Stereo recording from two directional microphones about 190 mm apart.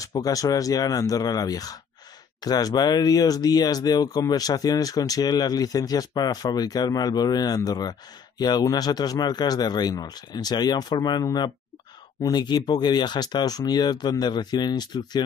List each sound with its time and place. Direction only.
0.0 s speech: 20° left (ahead or behind)